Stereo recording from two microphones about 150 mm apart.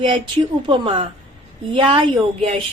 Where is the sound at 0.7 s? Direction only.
35° right (ahead or behind).